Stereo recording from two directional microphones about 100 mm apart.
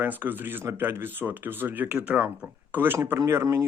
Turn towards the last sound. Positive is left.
turn(degrees=-30)  # may be behind; listen again after turning